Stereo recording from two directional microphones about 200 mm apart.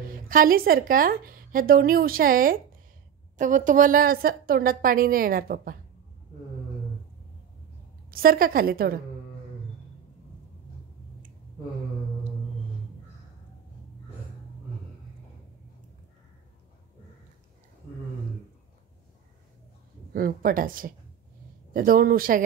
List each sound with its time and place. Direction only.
0.0 s a woman's voice: 45° right (ahead or behind)
8.1 s a woman's voice: 45° right (ahead or behind)
20.1 s a woman's voice: 45° right (ahead or behind)